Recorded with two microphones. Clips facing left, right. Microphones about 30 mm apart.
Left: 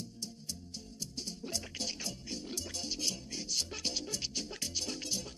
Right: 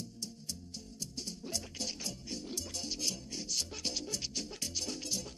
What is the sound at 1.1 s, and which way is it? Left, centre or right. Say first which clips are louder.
Music: left 1 dB; centre.